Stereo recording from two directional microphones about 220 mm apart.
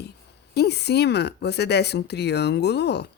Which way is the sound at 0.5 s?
50° left (ahead or behind).